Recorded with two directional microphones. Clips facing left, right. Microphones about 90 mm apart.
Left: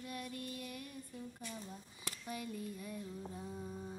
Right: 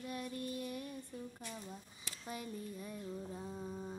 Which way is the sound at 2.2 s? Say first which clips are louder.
Even; 25° right (ahead or behind).